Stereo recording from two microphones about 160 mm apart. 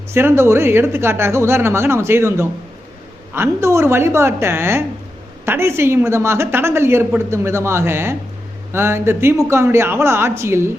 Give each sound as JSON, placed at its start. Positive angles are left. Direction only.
{"t": 0.1, "sound": "a woman's voice", "side_deg": -15}